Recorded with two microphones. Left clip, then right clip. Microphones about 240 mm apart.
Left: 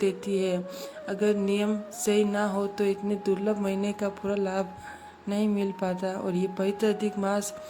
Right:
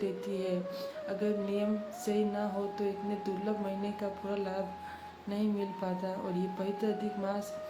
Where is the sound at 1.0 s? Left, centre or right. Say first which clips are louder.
Left 8 dB; left.